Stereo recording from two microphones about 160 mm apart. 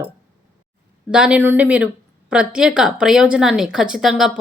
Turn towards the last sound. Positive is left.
turn(degrees=-5)  # may be behind; listen again after turning